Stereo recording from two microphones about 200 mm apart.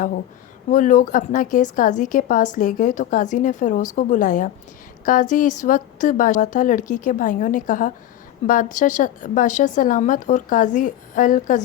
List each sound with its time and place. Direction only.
0.7 s speech: 40° left (ahead or behind)